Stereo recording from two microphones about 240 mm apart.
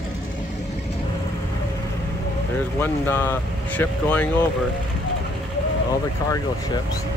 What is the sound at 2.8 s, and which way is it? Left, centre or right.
Speech, centre.